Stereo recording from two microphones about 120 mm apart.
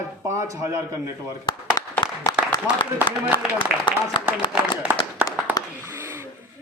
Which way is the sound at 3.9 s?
40° left (ahead or behind).